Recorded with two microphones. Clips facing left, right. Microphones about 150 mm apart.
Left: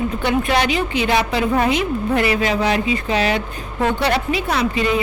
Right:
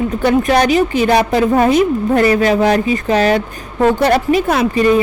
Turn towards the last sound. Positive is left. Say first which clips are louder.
# right 6 dB
turn(degrees=-45)  # may be behind; listen again after turning